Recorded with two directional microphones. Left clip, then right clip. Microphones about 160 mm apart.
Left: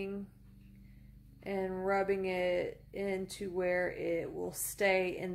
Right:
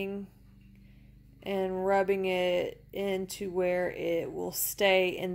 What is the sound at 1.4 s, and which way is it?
Speech, 30° right (ahead or behind).